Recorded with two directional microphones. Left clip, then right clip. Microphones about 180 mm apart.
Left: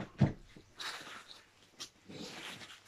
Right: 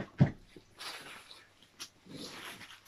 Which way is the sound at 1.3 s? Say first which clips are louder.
Right 1 dB; 20° left (ahead or behind).